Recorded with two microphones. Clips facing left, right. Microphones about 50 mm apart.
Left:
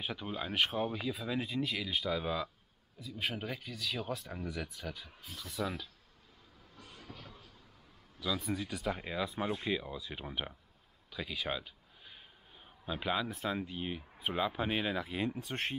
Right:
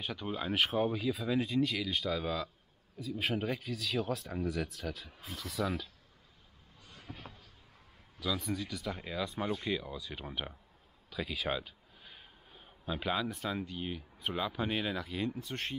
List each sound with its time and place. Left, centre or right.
0.0 s speech: centre
3.0 s speech: centre
7.1 s a sound: right
8.2 s speech: centre
8.8 s speech: centre